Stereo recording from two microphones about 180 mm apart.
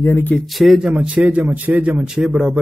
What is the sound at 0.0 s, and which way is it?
Speech, 10° left (ahead or behind).